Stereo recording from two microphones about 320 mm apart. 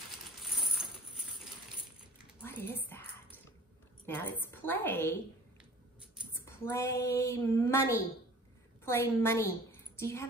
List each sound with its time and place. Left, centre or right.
0.4 s coin: centre
2.4 s a sound: centre
4.0 s a woman's voice: centre
6.4 s a woman's voice: centre